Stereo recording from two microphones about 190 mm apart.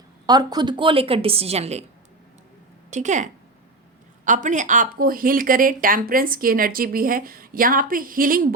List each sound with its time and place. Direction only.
0.3 s a woman's voice: 20° right (ahead or behind)
2.9 s speech: 40° right (ahead or behind)
4.3 s speech: 40° right (ahead or behind)